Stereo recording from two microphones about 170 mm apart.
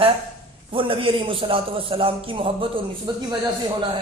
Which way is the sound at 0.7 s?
30° right (ahead or behind).